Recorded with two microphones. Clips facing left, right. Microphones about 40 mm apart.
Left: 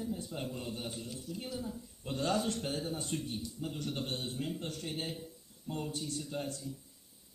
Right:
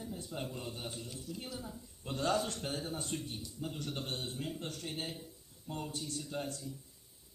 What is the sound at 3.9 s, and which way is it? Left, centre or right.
Speech, left.